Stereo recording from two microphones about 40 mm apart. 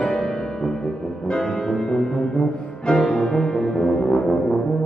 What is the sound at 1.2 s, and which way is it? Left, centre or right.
Music, left.